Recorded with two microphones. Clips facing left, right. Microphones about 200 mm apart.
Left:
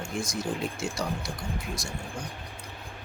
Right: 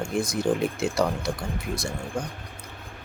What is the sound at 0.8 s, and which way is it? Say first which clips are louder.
Speech: right 7 dB; 60° right (ahead or behind).